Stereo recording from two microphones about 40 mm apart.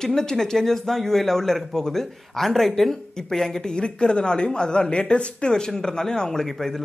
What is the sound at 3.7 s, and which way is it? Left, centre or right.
Speech, left.